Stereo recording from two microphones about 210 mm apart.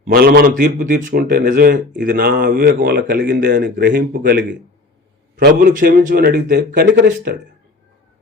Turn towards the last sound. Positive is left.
turn(degrees=-45)  # may be behind; listen again after turning